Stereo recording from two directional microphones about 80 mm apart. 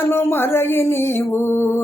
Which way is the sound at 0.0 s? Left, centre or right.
Left.